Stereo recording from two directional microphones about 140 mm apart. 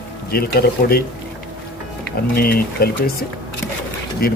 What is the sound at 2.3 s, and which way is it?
Speech, 90° left.